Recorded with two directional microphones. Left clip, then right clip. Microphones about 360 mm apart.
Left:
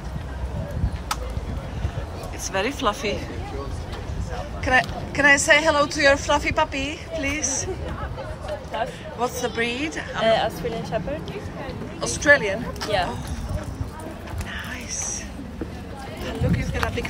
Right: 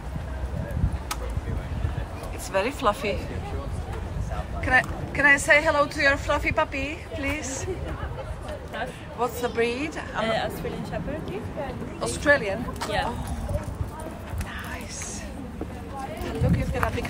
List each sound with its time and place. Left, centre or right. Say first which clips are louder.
2.4 s speech: even; centre
4.6 s speech: left 2 dB; centre
9.2 s speech: left 1 dB; centre
10.2 s speech: left 8 dB; centre
12.0 s speech: left 4 dB; centre
12.8 s speech: left 5 dB; right
16.3 s a sound: left 3 dB; centre